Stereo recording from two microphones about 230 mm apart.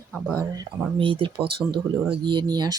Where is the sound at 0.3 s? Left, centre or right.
Centre.